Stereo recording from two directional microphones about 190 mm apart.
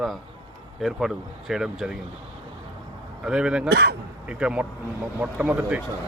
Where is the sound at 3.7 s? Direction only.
60° right (ahead or behind).